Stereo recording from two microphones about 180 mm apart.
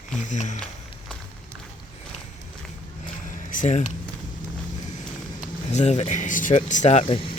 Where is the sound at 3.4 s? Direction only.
45° left (ahead or behind).